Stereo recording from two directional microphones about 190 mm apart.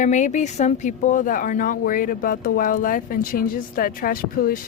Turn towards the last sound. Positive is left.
turn(degrees=50)  # may be behind; listen again after turning